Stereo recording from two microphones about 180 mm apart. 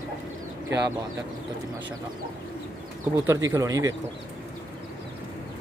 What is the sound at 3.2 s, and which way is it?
Speech, 15° right (ahead or behind).